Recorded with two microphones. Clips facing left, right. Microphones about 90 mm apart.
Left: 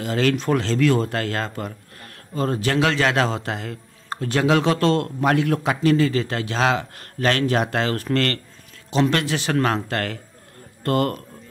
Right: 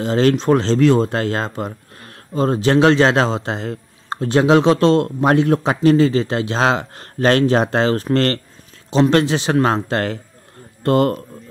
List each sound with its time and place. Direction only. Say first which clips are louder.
0.0 s a man's voice: right 6 dB; 30° right (ahead or behind)